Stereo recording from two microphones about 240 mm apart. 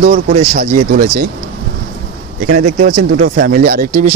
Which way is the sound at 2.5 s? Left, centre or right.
Right.